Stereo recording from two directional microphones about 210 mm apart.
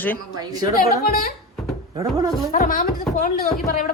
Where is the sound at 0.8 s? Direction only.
45° left (ahead or behind).